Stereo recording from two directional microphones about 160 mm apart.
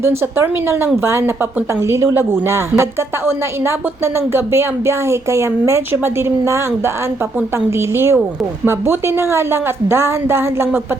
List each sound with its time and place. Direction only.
0.0 s a woman's voice: 15° right (ahead or behind)